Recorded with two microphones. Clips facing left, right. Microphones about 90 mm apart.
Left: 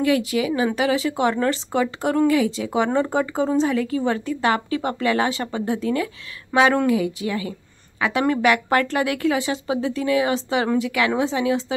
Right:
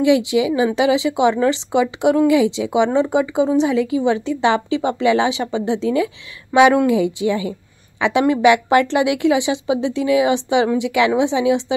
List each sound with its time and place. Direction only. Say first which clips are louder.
0.0 s speech: right 5 dB; 20° right (ahead or behind)